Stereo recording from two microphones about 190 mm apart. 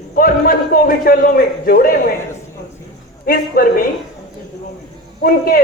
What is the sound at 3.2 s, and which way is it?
Speech, 50° left (ahead or behind).